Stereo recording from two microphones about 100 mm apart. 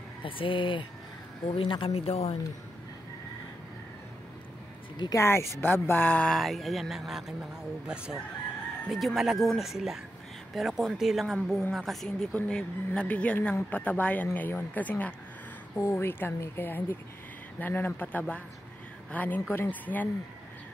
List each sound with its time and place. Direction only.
0.2 s speech: 60° left (ahead or behind); by 2.3 s 90° left
5.1 s a woman's voice: 25° left (ahead or behind)
6.3 s a woman's voice: centre (ahead or behind); by 20.1 s 15° left (ahead or behind)